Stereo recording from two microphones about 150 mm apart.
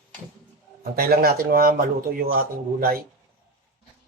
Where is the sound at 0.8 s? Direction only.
90° right.